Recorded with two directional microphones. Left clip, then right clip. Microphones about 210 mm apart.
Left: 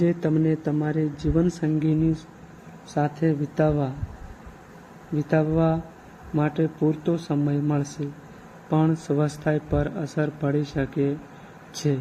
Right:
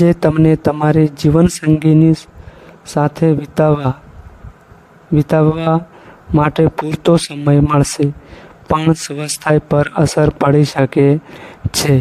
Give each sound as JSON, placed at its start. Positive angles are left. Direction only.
{"t": 0.0, "sound": "a man's voice", "side_deg": -50}
{"t": 5.1, "sound": "a man's voice", "side_deg": -45}